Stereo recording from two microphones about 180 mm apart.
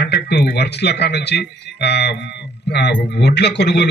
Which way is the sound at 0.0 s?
65° left (ahead or behind).